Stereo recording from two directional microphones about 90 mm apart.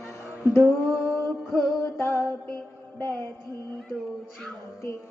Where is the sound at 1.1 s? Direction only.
30° left (ahead or behind).